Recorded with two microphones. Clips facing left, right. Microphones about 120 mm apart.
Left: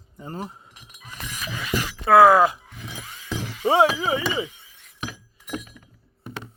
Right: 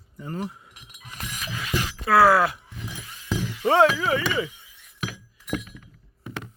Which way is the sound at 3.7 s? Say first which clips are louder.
Even; 15° left (ahead or behind).